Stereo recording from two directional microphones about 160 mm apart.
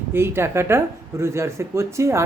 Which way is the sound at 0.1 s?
15° right (ahead or behind).